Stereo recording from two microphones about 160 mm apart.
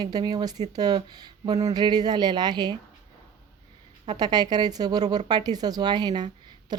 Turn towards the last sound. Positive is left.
turn(degrees=-25)  # may be behind; listen again after turning